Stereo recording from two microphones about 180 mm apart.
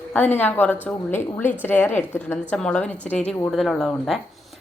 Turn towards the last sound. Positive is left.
turn(degrees=0)  # may be behind; listen again after turning